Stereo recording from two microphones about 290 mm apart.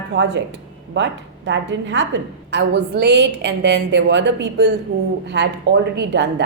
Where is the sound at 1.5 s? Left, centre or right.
Right.